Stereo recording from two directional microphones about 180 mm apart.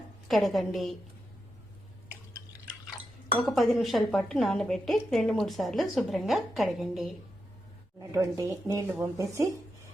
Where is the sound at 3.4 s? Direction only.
Centre (ahead or behind).